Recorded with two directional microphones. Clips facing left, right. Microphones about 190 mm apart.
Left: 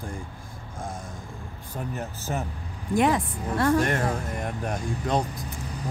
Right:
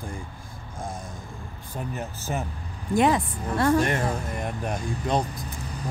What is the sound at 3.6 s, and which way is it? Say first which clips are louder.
A woman's voice: right 1 dB; 20° right (ahead or behind).